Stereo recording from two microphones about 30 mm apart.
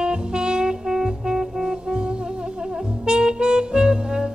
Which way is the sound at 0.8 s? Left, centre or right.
Centre.